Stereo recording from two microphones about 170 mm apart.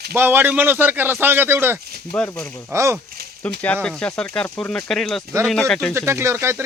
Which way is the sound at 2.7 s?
15° right (ahead or behind).